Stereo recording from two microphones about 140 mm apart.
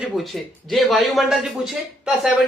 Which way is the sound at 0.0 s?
Centre (ahead or behind).